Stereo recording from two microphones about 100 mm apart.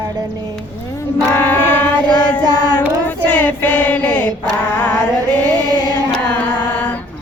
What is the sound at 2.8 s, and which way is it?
Child singing, 15° left (ahead or behind).